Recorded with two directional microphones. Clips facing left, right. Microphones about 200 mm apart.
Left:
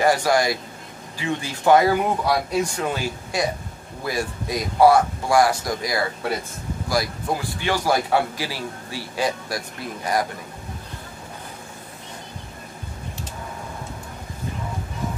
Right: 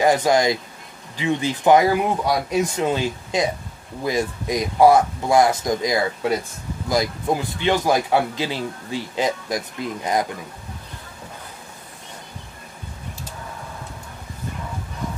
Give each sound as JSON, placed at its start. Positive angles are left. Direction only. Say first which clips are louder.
{"t": 0.0, "sound": "a man's voice", "louder": "right 2 dB", "side_deg": -20}